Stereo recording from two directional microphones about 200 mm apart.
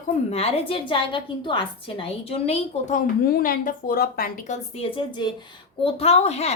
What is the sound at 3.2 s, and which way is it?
A woman's voice, 45° left (ahead or behind).